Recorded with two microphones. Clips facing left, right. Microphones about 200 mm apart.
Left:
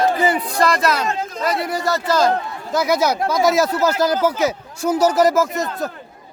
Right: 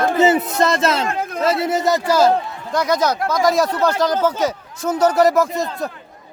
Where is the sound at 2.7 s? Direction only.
5° left (ahead or behind).